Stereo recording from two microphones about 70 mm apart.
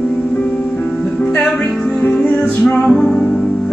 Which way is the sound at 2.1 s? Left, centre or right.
Centre.